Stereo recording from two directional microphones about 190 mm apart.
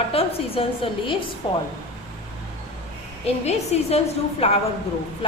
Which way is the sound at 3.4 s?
35° left (ahead or behind).